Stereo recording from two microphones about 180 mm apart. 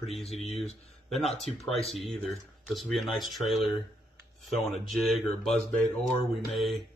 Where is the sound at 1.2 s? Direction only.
35° left (ahead or behind).